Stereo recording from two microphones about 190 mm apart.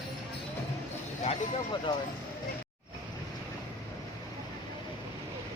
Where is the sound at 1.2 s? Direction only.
30° left (ahead or behind).